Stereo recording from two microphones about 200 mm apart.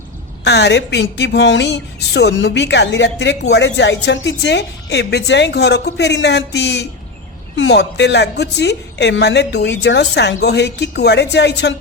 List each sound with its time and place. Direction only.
0.4 s a woman's voice: 55° left (ahead or behind)